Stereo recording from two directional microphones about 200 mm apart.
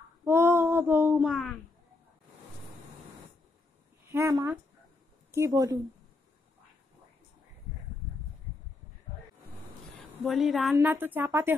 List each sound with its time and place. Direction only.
0.2 s a sound: 15° right (ahead or behind)
4.0 s a woman's voice: 15° right (ahead or behind)
10.2 s a woman's voice: centre (ahead or behind)